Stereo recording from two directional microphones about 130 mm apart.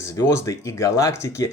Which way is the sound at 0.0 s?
25° left (ahead or behind).